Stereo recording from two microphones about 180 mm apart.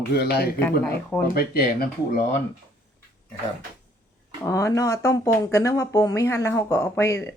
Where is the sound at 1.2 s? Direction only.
60° left (ahead or behind).